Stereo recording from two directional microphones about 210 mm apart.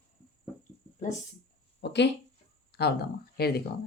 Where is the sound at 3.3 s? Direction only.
50° left (ahead or behind).